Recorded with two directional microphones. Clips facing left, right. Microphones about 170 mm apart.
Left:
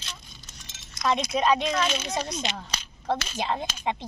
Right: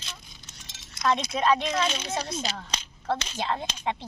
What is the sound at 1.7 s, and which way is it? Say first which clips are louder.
Speech: left 1 dB; 30° right (ahead or behind).